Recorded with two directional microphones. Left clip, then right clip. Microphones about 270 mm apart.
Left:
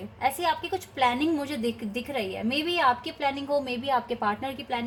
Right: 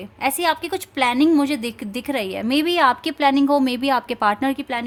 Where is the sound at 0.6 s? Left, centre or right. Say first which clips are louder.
Right 5 dB; right.